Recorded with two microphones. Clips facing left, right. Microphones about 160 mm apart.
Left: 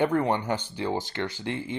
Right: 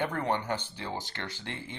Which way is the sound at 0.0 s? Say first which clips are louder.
Left 6 dB; 15° left (ahead or behind).